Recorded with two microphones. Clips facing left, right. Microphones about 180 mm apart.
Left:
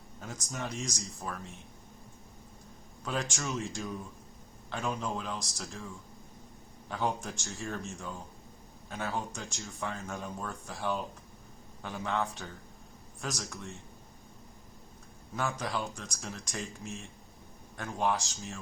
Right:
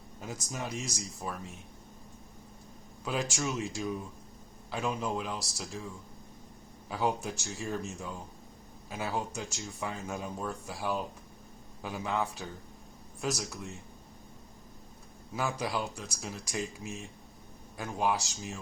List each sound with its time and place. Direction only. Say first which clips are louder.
0.2 s speech: right 1 dB; 5° right (ahead or behind)
3.0 s speech: right 2 dB; 5° right (ahead or behind)
6.9 s speech: right 2 dB; 5° right (ahead or behind)
15.4 s speech: right 1 dB; 5° right (ahead or behind)